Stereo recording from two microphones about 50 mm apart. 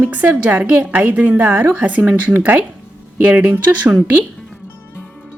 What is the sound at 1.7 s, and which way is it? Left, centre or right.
Speech, right.